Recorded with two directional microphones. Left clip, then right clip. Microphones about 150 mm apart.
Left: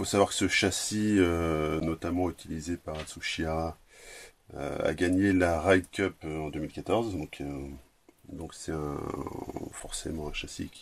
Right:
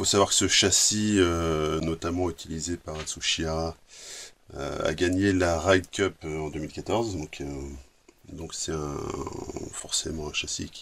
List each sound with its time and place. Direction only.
0.0 s speech: 40° left (ahead or behind)